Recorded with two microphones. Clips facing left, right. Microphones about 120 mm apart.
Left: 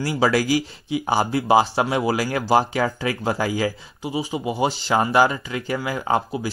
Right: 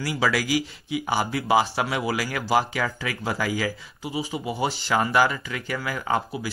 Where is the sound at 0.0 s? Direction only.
30° left (ahead or behind).